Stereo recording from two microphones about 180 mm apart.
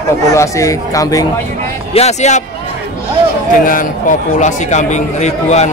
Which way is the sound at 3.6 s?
50° left (ahead or behind).